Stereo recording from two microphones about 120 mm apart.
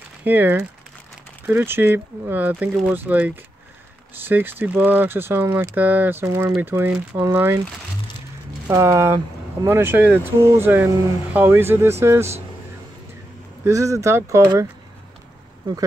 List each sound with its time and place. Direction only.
0.2 s speech: 15° right (ahead or behind)
8.6 s speech: 25° right (ahead or behind)
13.7 s speech: 25° right (ahead or behind)